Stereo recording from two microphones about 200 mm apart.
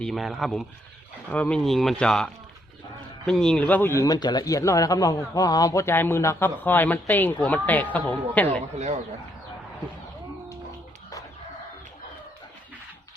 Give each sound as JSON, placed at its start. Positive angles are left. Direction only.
{"t": 0.0, "sound": "speech", "side_deg": 0}
{"t": 8.4, "sound": "speech", "side_deg": -35}